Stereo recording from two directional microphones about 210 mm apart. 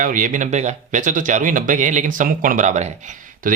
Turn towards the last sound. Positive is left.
turn(degrees=-40)  # may be behind; listen again after turning